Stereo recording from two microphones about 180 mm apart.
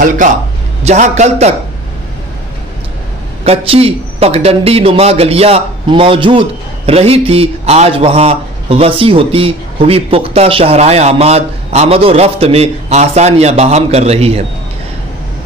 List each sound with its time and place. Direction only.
0.2 s a man's voice: 45° right (ahead or behind)
3.4 s a man's voice: 30° right (ahead or behind)